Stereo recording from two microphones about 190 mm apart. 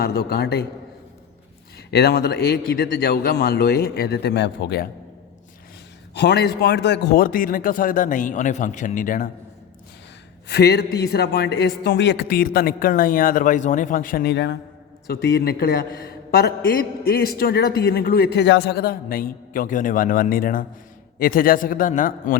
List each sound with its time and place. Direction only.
0.0 s speech: 55° left (ahead or behind)
1.9 s speech: 60° left (ahead or behind)
6.1 s a man's voice: 60° left (ahead or behind); by 9.3 s 45° left (ahead or behind)
10.5 s speech: 60° left (ahead or behind)
15.0 s a man's voice: 55° left (ahead or behind)